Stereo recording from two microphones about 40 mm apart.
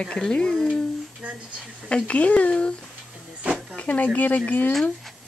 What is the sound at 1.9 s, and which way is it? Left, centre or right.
Speech, left.